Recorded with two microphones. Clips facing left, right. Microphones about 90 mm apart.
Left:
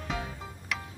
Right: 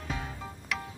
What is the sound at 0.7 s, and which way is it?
Music, centre (ahead or behind).